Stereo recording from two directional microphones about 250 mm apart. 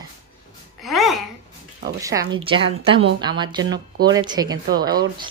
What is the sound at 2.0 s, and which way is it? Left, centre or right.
Speech, centre.